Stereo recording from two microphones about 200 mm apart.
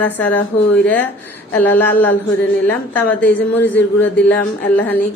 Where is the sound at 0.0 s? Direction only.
10° left (ahead or behind).